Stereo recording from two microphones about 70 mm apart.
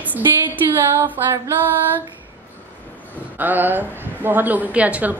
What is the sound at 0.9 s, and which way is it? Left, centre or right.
Speech, right.